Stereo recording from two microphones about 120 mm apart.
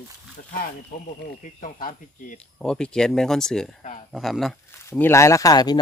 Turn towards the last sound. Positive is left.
turn(degrees=35)  # may be behind; listen again after turning